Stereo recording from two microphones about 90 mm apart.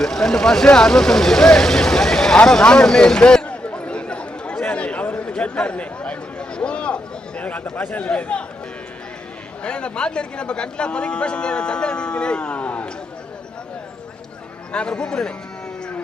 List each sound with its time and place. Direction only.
0.0 s speech: 5° left (ahead or behind)
9.6 s speech: 10° left (ahead or behind)
14.7 s speech: 10° left (ahead or behind)